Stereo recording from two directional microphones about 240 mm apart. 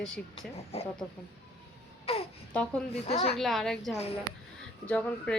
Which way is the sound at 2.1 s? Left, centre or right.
Left.